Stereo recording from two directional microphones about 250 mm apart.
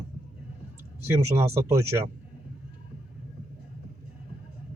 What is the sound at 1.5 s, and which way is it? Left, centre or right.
Speech, centre.